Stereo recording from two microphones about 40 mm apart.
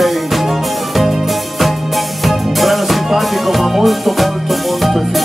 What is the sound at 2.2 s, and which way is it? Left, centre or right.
Music, centre.